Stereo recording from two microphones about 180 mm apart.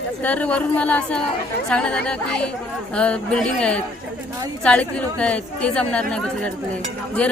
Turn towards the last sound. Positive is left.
turn(degrees=5)  # may be behind; listen again after turning